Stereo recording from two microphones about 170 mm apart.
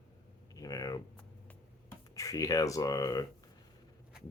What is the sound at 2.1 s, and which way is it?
Speech, 20° left (ahead or behind).